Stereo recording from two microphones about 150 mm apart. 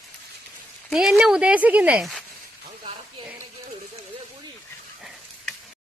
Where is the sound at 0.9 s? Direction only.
5° right (ahead or behind).